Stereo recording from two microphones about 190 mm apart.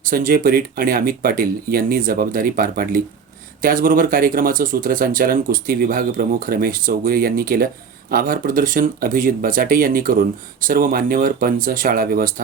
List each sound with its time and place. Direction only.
0.0 s speech: 45° right (ahead or behind)